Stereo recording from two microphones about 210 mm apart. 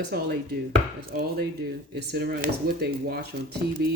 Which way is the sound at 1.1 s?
45° right (ahead or behind).